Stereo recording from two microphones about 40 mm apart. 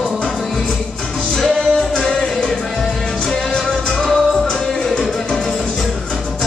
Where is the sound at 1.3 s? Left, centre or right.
Centre.